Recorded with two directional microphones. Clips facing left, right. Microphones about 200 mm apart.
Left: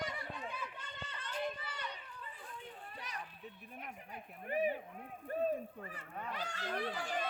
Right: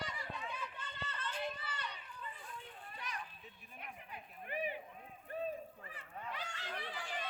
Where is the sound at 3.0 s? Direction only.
40° left (ahead or behind).